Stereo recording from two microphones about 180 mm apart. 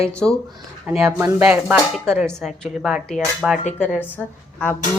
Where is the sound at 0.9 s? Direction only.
15° right (ahead or behind).